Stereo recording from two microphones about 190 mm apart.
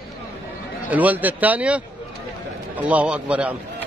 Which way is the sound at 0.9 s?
10° right (ahead or behind).